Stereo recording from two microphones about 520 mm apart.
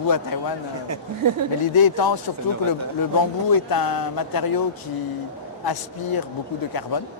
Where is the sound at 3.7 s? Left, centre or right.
Left.